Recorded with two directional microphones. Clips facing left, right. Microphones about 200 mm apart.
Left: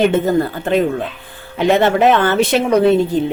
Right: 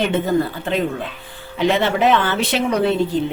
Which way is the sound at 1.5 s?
50° left (ahead or behind).